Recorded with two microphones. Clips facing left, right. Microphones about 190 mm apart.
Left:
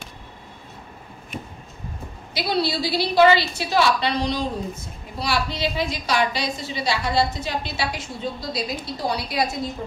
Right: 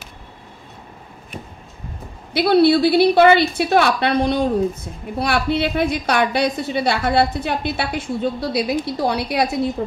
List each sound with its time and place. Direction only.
2.3 s a woman's voice: 60° right (ahead or behind)
9.8 s a woman's voice: 80° right